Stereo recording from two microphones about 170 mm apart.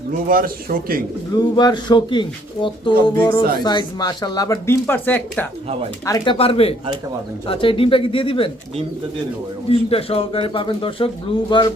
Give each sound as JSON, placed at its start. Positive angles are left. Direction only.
{"t": 0.1, "sound": "a man's voice", "side_deg": -55}
{"t": 1.4, "sound": "speech", "side_deg": 25}
{"t": 6.3, "sound": "a man's voice", "side_deg": 35}
{"t": 9.6, "sound": "a man's voice", "side_deg": 35}